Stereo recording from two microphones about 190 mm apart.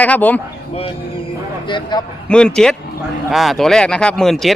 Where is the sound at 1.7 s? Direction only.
25° left (ahead or behind).